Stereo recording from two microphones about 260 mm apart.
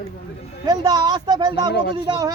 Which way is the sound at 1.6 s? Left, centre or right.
Left.